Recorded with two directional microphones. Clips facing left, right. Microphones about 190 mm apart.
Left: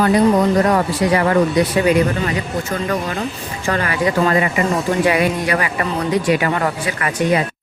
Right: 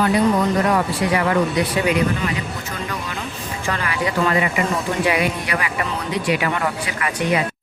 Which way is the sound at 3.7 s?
45° left (ahead or behind).